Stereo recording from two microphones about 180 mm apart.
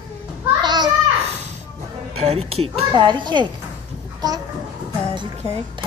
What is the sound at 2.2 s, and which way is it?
Speech, 35° right (ahead or behind).